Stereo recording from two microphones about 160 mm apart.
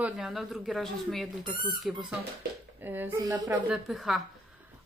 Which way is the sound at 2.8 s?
10° right (ahead or behind).